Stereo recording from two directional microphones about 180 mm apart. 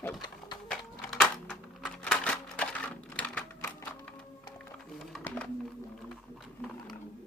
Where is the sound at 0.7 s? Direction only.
Centre (ahead or behind).